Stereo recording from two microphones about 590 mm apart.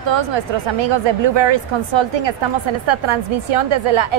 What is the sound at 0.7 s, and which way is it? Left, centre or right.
A woman's voice, right.